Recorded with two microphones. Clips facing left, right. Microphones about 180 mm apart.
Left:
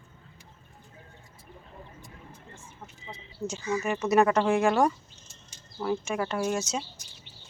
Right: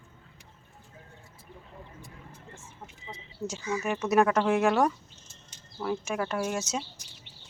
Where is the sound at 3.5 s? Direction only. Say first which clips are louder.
Left 2 dB; 5° right (ahead or behind).